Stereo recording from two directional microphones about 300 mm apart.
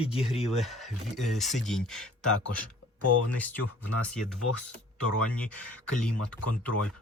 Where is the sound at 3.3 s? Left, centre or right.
Centre.